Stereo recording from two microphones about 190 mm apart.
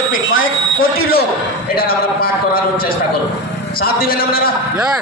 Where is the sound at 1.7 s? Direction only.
50° left (ahead or behind).